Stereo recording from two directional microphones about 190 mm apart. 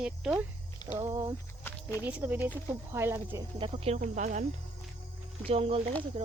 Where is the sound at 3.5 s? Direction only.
30° right (ahead or behind).